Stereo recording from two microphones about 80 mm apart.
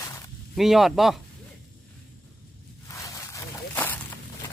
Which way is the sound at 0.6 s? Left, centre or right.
Centre.